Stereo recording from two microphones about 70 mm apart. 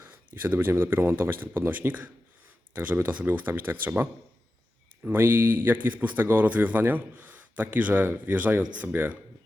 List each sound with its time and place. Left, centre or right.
0.0 s speech: right